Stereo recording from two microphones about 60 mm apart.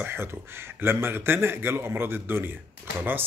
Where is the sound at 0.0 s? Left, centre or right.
Right.